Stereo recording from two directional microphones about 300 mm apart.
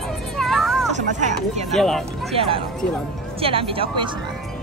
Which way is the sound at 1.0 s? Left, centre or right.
Right.